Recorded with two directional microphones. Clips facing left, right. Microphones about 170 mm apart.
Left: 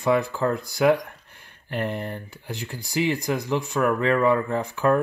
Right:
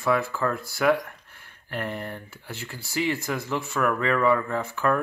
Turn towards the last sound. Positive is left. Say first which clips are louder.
# left 3 dB
turn(degrees=20)  # may be behind; listen again after turning